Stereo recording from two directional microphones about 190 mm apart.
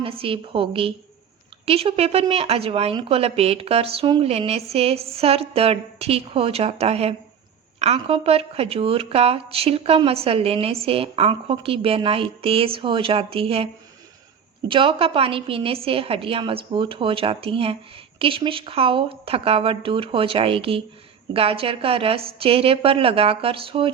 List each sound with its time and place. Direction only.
0.0 s a woman's voice: 30° right (ahead or behind)
14.7 s a woman's voice: 30° right (ahead or behind)